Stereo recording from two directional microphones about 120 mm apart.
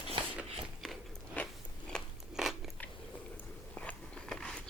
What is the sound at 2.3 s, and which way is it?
Biting, 5° right (ahead or behind).